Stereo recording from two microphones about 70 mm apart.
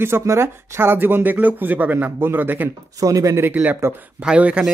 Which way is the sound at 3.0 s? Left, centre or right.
Right.